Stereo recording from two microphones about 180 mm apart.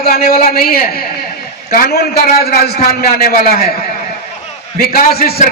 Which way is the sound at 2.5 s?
60° left (ahead or behind).